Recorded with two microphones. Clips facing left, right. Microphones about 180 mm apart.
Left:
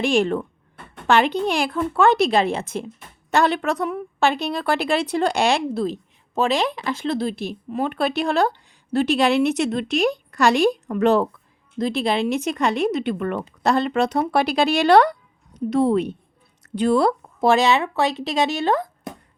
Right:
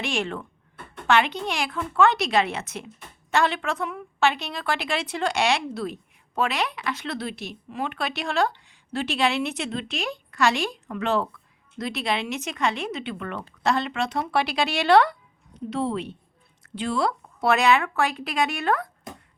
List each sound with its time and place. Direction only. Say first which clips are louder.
0.0 s a woman's voice: left 9 dB; 35° left (ahead or behind)
11.8 s a woman's voice: left 6 dB; 30° left (ahead or behind)